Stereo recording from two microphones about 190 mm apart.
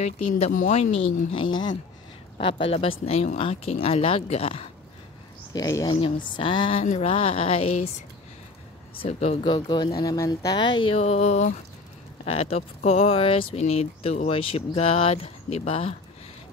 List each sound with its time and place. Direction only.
0.5 s speech: 40° left (ahead or behind)
5.5 s speech: 20° left (ahead or behind)
9.0 s speech: 30° left (ahead or behind)